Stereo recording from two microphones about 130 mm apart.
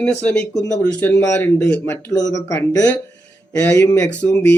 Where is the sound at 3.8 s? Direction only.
30° left (ahead or behind).